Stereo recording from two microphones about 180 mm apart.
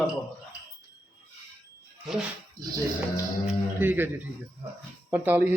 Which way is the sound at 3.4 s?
10° right (ahead or behind).